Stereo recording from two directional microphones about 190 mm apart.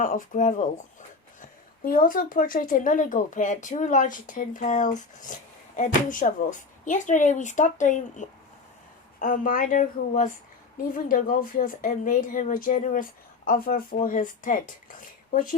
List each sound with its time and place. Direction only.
0.0 s a woman's voice: 45° left (ahead or behind)